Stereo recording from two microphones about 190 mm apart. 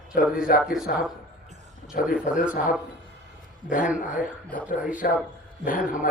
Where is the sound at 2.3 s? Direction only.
5° right (ahead or behind).